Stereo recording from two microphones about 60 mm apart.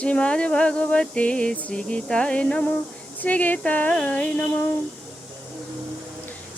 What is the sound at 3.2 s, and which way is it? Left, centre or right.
A woman's voice, left.